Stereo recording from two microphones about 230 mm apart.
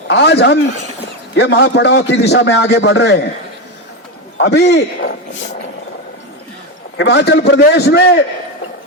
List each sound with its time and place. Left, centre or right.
0.1 s a man's voice: left
4.4 s a man's voice: left
6.9 s a man's voice: left